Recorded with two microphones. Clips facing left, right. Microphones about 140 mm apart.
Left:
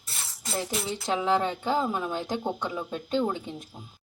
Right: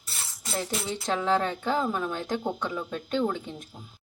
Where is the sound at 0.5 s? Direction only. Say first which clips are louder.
Even; 10° left (ahead or behind).